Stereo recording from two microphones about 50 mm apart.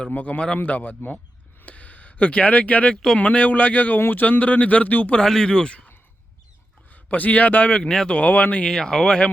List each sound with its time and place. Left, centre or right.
0.0 s speech: left
5.2 s speech: centre
6.9 s a man's voice: left
7.8 s speech: centre
8.1 s speech: left
8.6 s speech: centre